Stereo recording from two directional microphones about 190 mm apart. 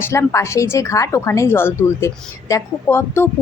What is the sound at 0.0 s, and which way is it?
A woman's voice, 15° left (ahead or behind).